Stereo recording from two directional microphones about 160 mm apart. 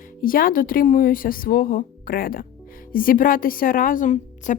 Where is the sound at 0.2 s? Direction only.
60° left (ahead or behind).